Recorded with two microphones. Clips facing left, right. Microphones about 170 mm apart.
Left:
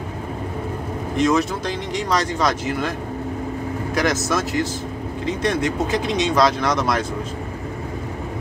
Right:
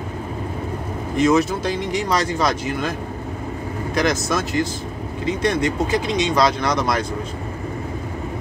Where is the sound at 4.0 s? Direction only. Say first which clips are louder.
Right 1 dB; 5° left (ahead or behind).